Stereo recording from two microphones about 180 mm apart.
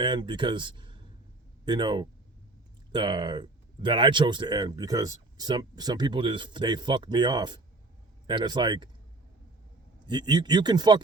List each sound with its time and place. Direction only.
0.0 s speech: 25° right (ahead or behind)
10.1 s speech: 25° right (ahead or behind)